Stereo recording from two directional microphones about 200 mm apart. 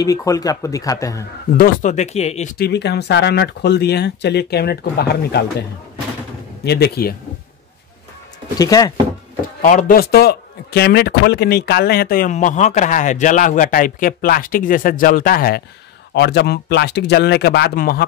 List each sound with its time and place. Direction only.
0.0 s speech: 15° left (ahead or behind)
1.6 s speech: 35° left (ahead or behind)
2.5 s speech: 55° left (ahead or behind)
6.6 s speech: 55° left (ahead or behind)
8.5 s speech: 20° left (ahead or behind)
9.6 s a man's voice: 40° left (ahead or behind)